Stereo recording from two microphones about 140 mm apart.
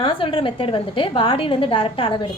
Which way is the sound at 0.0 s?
40° left (ahead or behind).